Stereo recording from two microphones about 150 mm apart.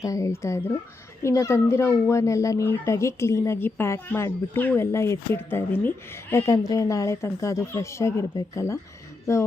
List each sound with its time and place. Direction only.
0.0 s speech: 20° left (ahead or behind)